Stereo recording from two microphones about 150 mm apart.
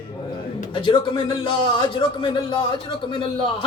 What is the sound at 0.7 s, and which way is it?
A man's voice, 35° left (ahead or behind).